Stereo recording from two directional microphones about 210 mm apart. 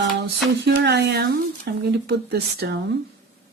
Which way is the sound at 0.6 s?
55° right (ahead or behind).